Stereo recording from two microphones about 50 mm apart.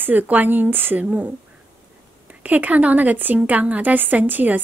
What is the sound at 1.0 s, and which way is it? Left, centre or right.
Speech, right.